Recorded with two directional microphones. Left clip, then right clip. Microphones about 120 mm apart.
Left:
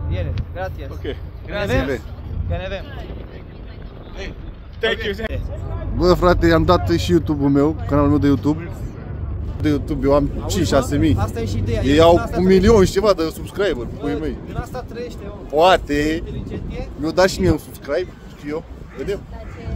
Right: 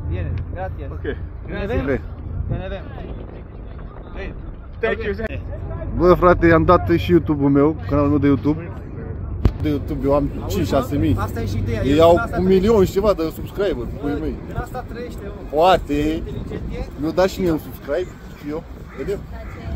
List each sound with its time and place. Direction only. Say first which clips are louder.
1.5 s speech: left 2 dB; 45° left (ahead or behind)
5.1 s speech: even; 30° left (ahead or behind)
5.9 s speech: right 2 dB; 10° left (ahead or behind)
9.6 s speech: left 4 dB; 30° left (ahead or behind)